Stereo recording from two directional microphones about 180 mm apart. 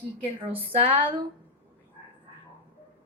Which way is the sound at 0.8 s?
30° right (ahead or behind).